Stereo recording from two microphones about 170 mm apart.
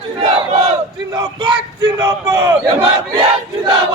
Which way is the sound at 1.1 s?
25° right (ahead or behind).